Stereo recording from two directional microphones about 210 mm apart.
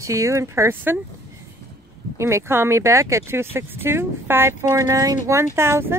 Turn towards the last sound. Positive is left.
turn(degrees=-10)  # may be behind; listen again after turning